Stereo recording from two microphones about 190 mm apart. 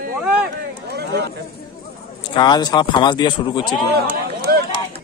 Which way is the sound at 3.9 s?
55° right (ahead or behind).